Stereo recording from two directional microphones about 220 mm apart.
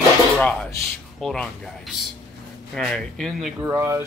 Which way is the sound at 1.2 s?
Centre (ahead or behind).